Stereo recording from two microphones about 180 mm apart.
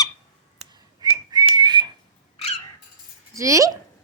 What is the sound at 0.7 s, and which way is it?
Whistling, 25° right (ahead or behind).